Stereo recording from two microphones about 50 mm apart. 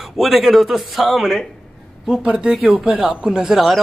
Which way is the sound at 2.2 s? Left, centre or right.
Centre.